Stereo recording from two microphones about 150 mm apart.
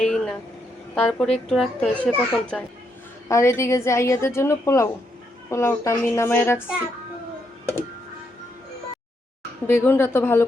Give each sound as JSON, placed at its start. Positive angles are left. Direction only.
{"t": 0.0, "sound": "vehicle", "side_deg": 5}
{"t": 0.9, "sound": "a child's voice", "side_deg": 5}
{"t": 3.2, "sound": "a woman's voice", "side_deg": 20}
{"t": 9.6, "sound": "a child's voice", "side_deg": 15}